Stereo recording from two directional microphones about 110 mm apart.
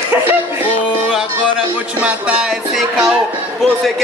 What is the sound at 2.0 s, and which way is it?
Music, 10° right (ahead or behind).